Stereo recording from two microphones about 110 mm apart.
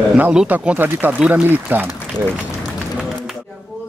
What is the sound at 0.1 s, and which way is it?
Speech, 5° right (ahead or behind).